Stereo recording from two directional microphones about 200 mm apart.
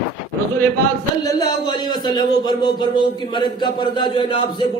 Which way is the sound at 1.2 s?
20° left (ahead or behind).